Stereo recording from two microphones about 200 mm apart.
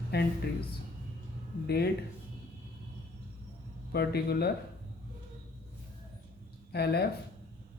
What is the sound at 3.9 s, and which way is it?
Speech, 50° left (ahead or behind).